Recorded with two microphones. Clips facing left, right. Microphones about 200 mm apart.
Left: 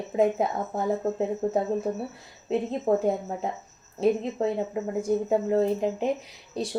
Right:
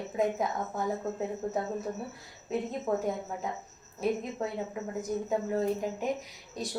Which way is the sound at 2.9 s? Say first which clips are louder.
Left 7 dB; 30° left (ahead or behind).